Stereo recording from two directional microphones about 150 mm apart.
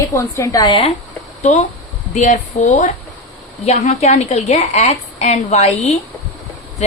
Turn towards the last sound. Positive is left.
turn(degrees=45)  # may be behind; listen again after turning